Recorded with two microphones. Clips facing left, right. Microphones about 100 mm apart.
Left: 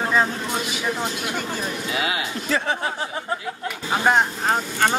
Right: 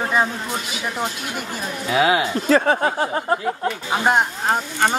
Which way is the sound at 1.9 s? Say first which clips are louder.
Right 11 dB; 30° right (ahead or behind).